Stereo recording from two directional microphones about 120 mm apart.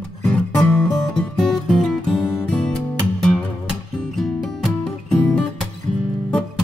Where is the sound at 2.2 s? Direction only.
20° left (ahead or behind).